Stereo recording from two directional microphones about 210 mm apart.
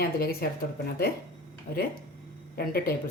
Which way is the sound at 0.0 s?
45° left (ahead or behind).